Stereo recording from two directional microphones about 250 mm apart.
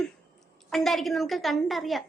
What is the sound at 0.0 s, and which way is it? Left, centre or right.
A woman's voice, centre.